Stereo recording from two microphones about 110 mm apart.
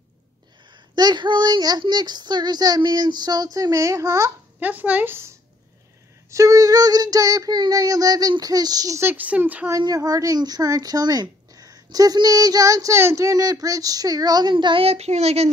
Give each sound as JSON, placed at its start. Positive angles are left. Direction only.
{"t": 0.9, "sound": "speech", "side_deg": -40}
{"t": 4.6, "sound": "speech", "side_deg": -15}
{"t": 6.3, "sound": "speech", "side_deg": -30}
{"t": 9.0, "sound": "speech", "side_deg": -15}
{"t": 9.7, "sound": "speech", "side_deg": -35}
{"t": 14.9, "sound": "speech", "side_deg": -80}